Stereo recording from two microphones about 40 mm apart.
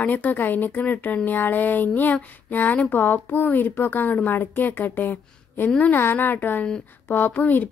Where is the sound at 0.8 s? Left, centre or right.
Left.